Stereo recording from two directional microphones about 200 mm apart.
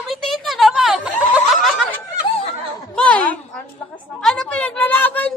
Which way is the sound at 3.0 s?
5° left (ahead or behind).